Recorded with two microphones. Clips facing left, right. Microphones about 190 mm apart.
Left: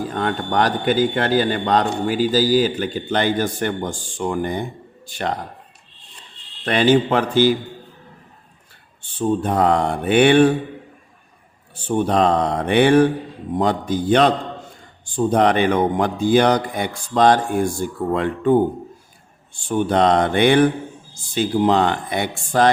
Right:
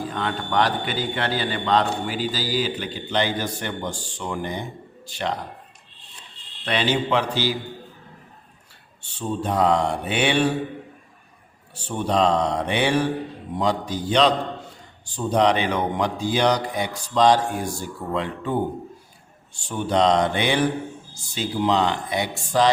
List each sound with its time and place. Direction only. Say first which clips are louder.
0.1 s a man's voice: left 4 dB; 45° left (ahead or behind)
6.7 s a man's voice: left 7 dB; 50° left (ahead or behind)
9.1 s mantra: left 5 dB; 55° left (ahead or behind)
11.9 s mantra: left 4 dB; 50° left (ahead or behind)
13.6 s a man's voice: left 4 dB; 50° left (ahead or behind)
19.5 s mantra: left 4 dB; 55° left (ahead or behind)
21.3 s a man's voice: left 5 dB; 55° left (ahead or behind)